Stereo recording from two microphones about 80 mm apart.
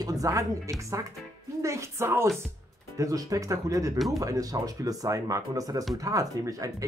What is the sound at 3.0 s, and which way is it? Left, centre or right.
Speech, right.